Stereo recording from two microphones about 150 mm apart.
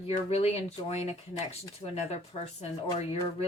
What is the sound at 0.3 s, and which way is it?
A woman's voice, 45° left (ahead or behind).